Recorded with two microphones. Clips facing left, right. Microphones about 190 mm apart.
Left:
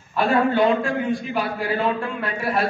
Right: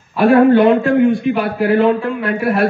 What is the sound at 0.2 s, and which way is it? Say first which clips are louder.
A man's voice: right 9 dB; 65° right (ahead or behind).